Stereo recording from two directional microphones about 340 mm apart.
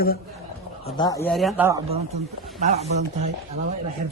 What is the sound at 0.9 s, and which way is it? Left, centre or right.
Speech, centre.